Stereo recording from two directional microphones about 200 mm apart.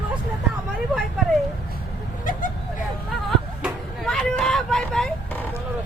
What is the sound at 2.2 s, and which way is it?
Vehicle, 40° left (ahead or behind).